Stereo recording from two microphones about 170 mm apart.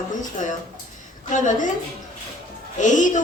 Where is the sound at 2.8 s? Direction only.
50° left (ahead or behind).